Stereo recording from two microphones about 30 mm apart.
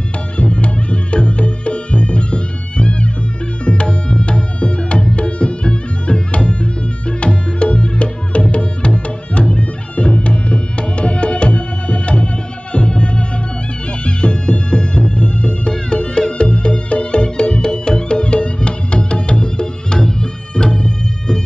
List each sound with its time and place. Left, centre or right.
0.4 s music: left
3.6 s tabla: left
12.7 s music: left